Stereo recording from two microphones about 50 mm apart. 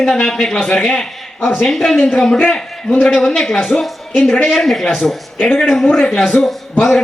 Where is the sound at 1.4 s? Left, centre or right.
Left.